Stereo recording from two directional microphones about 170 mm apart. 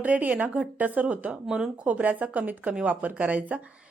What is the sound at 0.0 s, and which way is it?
Speech, 10° right (ahead or behind).